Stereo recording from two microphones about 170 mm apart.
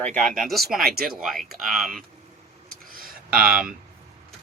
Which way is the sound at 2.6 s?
60° right (ahead or behind).